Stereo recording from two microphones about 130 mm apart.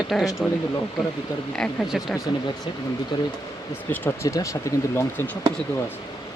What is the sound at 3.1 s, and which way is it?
Speech, 35° left (ahead or behind).